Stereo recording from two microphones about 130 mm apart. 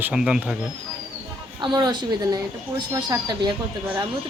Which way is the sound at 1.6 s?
35° right (ahead or behind).